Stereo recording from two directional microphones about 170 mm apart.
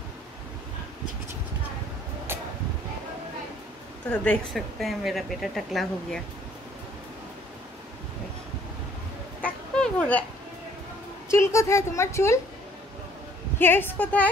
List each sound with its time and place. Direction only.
4.1 s speech: 5° left (ahead or behind)
9.4 s a sound: 5° left (ahead or behind)
11.2 s a woman's voice: 15° left (ahead or behind)
13.6 s a woman's voice: 10° left (ahead or behind)